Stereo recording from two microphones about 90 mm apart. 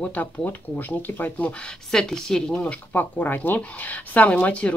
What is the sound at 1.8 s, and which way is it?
Speech, 5° left (ahead or behind).